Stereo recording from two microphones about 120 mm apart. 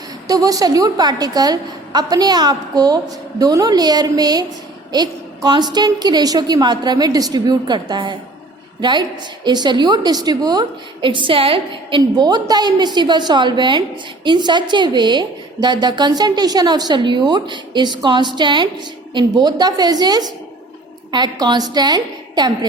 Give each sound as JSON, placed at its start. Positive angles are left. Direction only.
{"t": 0.3, "sound": "a woman's voice", "side_deg": -30}